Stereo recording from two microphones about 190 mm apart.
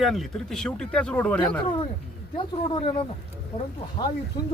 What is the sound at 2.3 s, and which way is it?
Speech, 25° left (ahead or behind).